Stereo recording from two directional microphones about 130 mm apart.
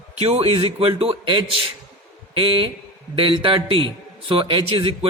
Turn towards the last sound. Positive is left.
turn(degrees=-45)  # may be behind; listen again after turning